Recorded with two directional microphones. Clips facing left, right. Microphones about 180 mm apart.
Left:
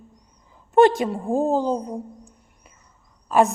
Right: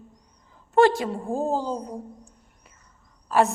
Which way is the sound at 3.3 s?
15° left (ahead or behind).